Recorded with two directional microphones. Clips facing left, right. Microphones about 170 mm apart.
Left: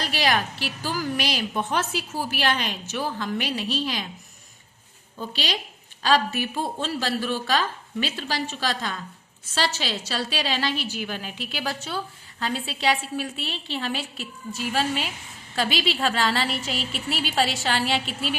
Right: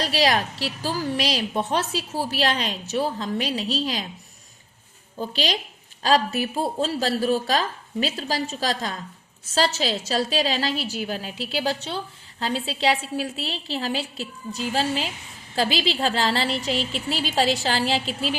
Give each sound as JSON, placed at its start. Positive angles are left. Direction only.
{"t": 0.0, "sound": "a woman's voice", "side_deg": -35}
{"t": 5.1, "sound": "a woman's voice", "side_deg": -35}